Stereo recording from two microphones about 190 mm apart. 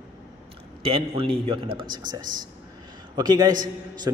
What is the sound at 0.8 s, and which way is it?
A man's voice, 30° right (ahead or behind).